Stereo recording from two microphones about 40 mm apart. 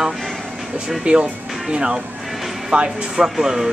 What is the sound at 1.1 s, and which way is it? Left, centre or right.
Speech, right.